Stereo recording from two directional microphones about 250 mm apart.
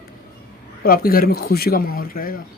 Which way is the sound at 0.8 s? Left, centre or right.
Left.